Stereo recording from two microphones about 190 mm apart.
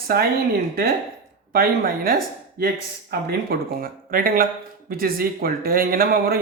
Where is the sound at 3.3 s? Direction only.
50° right (ahead or behind).